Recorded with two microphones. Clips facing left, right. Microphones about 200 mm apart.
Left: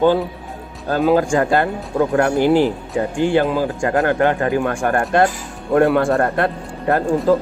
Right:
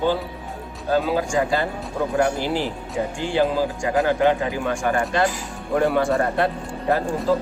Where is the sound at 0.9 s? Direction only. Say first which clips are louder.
Left 5 dB; 55° left (ahead or behind).